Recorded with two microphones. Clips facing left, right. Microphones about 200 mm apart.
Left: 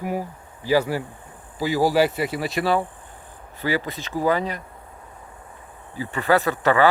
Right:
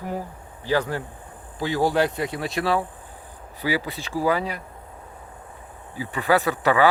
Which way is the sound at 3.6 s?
10° right (ahead or behind).